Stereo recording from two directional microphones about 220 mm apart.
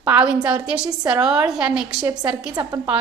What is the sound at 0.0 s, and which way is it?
A woman's voice, 5° right (ahead or behind).